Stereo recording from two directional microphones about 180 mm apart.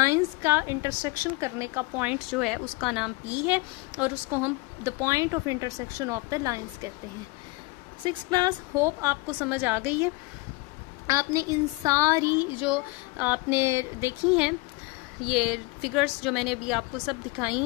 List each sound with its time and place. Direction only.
0.0 s a woman's voice: 15° right (ahead or behind)
8.0 s a woman's voice: 25° right (ahead or behind)
15.2 s a woman's voice: centre (ahead or behind)